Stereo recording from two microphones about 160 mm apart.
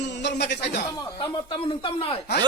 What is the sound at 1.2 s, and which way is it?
Speech, 30° left (ahead or behind).